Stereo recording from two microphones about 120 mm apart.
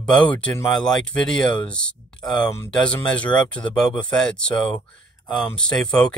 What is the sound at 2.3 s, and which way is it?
Speech, 35° left (ahead or behind).